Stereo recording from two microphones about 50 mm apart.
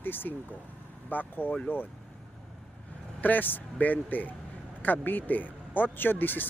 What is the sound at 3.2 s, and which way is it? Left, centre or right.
Speech, left.